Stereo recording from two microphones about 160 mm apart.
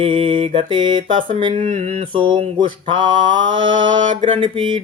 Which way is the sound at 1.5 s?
55° right (ahead or behind).